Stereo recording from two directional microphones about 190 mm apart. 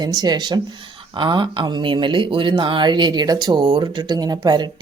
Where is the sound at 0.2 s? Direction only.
20° right (ahead or behind).